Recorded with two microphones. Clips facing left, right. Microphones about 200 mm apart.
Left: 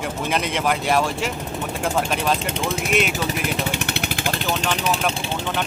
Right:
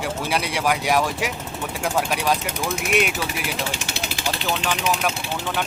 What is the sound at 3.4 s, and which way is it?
Vehicle, 60° left (ahead or behind).